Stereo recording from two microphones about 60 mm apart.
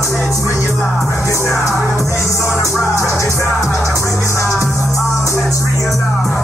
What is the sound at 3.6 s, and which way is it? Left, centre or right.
Music, centre.